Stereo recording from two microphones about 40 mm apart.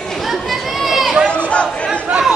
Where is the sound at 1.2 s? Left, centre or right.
Left.